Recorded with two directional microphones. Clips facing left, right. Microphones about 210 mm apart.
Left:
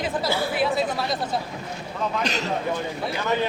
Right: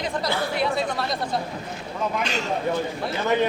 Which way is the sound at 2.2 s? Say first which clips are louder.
Left 1 dB; 40° left (ahead or behind).